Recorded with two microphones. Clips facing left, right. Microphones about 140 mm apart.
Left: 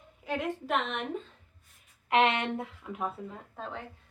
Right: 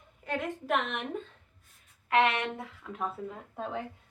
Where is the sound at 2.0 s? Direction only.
25° left (ahead or behind).